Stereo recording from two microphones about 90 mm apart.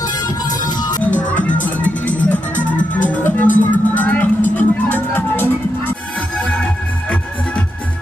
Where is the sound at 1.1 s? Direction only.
15° left (ahead or behind).